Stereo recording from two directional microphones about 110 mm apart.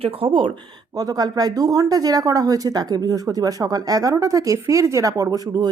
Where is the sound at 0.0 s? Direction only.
55° right (ahead or behind).